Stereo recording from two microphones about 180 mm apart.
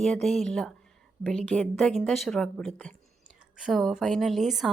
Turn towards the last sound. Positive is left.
turn(degrees=0)  # may be behind; listen again after turning